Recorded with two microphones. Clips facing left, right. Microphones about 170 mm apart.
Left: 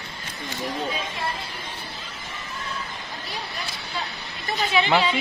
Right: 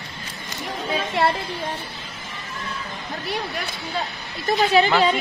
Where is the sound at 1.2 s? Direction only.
75° right (ahead or behind).